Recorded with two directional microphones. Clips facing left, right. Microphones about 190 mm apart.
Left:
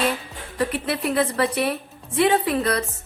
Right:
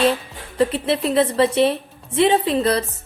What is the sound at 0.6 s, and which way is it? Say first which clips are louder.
A woman's voice: right 5 dB; 25° right (ahead or behind).